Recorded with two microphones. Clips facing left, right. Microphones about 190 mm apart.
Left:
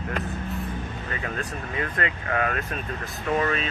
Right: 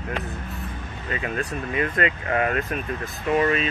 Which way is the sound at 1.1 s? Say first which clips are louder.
Right 6 dB; 15° right (ahead or behind).